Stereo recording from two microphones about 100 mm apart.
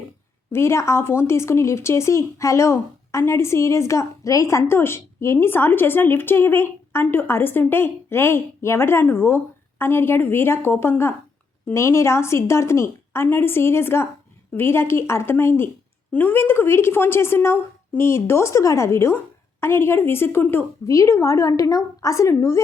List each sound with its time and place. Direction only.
0.5 s speech: 25° left (ahead or behind)
20.8 s a woman's voice: 30° left (ahead or behind)